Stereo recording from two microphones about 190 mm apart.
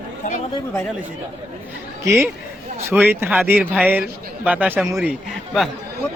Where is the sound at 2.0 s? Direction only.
15° right (ahead or behind).